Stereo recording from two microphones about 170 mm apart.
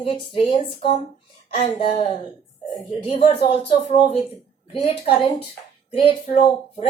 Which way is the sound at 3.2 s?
30° left (ahead or behind).